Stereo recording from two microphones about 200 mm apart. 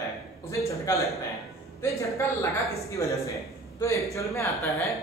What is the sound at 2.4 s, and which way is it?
Speech, 15° left (ahead or behind).